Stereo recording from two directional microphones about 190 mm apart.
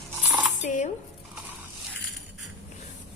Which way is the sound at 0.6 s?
40° left (ahead or behind).